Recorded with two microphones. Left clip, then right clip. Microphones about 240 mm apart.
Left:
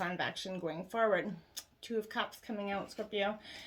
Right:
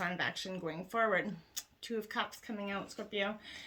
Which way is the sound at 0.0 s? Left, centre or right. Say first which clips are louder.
Even; right.